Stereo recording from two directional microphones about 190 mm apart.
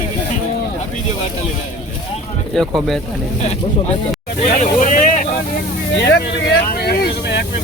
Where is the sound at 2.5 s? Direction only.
Centre (ahead or behind).